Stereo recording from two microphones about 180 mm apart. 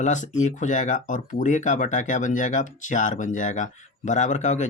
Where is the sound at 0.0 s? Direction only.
40° left (ahead or behind).